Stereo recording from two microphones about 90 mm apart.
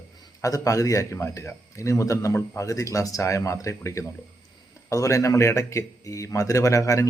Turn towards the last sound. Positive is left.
turn(degrees=35)  # may be behind; listen again after turning